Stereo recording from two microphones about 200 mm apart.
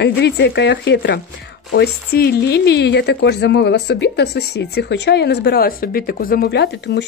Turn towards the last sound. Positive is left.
turn(degrees=55)  # may be behind; listen again after turning